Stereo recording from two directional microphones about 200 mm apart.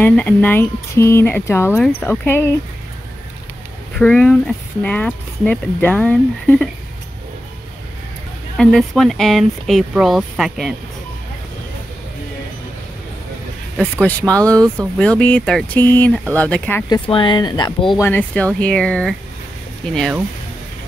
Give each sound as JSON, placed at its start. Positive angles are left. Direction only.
{"t": 0.0, "sound": "speech", "side_deg": 10}
{"t": 4.0, "sound": "speech", "side_deg": 5}
{"t": 8.5, "sound": "speech", "side_deg": 0}
{"t": 14.0, "sound": "speech", "side_deg": 5}
{"t": 16.9, "sound": "speech", "side_deg": 25}
{"t": 18.0, "sound": "speech", "side_deg": 10}